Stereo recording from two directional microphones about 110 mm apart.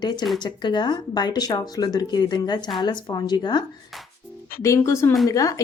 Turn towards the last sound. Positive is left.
turn(degrees=30)  # may be behind; listen again after turning